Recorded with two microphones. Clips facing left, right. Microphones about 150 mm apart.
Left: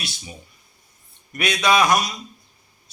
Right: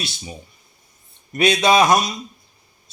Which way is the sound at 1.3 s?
25° right (ahead or behind).